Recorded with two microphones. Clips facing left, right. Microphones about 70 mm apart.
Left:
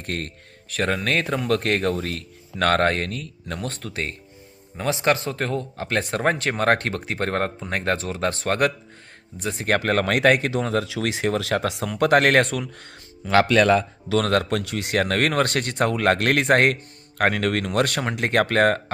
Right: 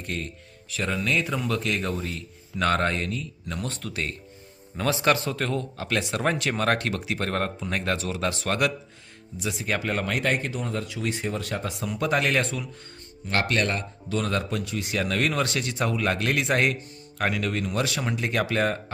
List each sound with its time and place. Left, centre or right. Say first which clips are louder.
0.0 s speech: left 3 dB; left
4.8 s speech: left 1 dB; left
9.6 s speech: left 7 dB; left
14.1 s speech: left 6 dB; left